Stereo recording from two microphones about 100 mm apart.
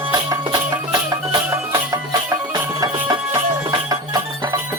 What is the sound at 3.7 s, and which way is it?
Music, 40° right (ahead or behind).